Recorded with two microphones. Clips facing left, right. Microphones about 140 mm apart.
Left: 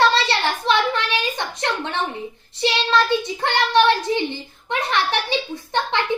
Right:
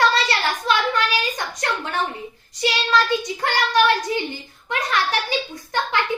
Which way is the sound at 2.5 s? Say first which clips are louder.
Left 1 dB; 25° left (ahead or behind).